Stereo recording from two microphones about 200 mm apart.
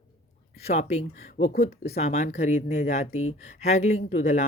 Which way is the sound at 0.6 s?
30° left (ahead or behind).